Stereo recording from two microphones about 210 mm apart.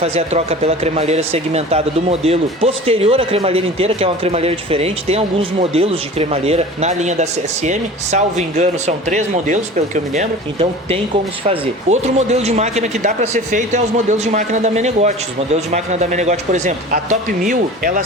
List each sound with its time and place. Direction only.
0.0 s a man's voice: 30° right (ahead or behind)